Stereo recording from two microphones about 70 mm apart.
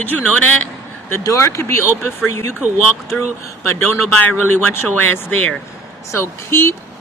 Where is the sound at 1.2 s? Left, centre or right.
Left.